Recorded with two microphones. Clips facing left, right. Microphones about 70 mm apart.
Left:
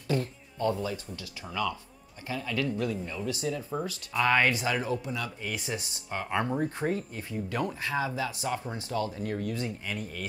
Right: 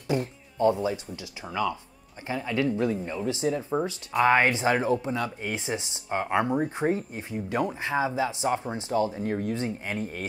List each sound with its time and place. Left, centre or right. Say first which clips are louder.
0.1 s speech: right 2 dB; right